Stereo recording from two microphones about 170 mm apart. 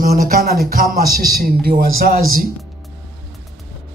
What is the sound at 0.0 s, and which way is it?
A man's voice, 60° right (ahead or behind).